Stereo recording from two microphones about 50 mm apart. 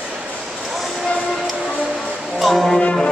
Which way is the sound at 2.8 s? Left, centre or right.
Centre.